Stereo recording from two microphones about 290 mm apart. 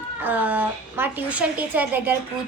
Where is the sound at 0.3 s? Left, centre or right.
Centre.